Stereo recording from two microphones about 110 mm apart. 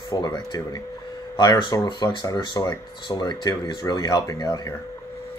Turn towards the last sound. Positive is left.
turn(degrees=40)  # may be behind; listen again after turning